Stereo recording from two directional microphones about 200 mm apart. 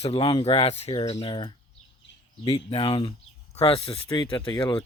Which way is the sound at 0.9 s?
20° left (ahead or behind).